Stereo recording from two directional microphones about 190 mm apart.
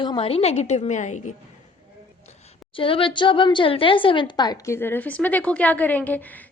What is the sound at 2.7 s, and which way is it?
Speech, 25° left (ahead or behind).